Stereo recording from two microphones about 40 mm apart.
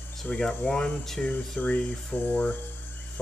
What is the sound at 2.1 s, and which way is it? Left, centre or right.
Speech, left.